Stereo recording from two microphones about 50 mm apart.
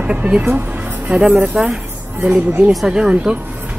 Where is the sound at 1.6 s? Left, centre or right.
Centre.